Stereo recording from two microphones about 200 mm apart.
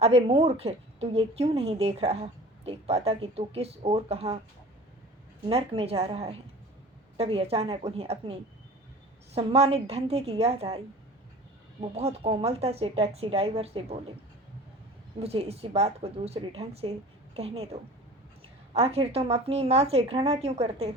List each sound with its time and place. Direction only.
0.0 s a woman's voice: 30° right (ahead or behind)
5.5 s a woman's voice: 30° right (ahead or behind)
11.8 s a woman's voice: 30° right (ahead or behind)
15.2 s a woman's voice: 30° right (ahead or behind)